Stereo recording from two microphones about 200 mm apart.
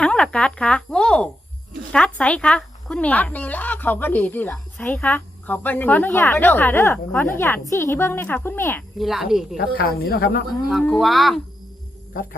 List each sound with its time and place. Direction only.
0.0 s speech: 5° left (ahead or behind)
9.0 s speech: centre (ahead or behind)
9.6 s speech: 50° left (ahead or behind)
10.5 s speech: centre (ahead or behind)